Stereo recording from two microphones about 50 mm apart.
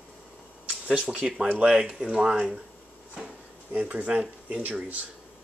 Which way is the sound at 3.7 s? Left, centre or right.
Right.